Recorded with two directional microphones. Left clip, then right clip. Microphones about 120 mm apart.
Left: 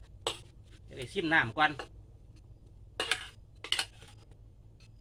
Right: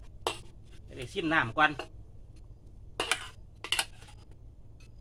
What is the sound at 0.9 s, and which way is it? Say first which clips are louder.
Speech: even; 10° right (ahead or behind).